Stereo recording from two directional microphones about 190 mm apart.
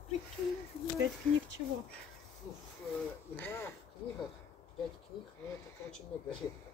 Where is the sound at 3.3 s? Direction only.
10° left (ahead or behind).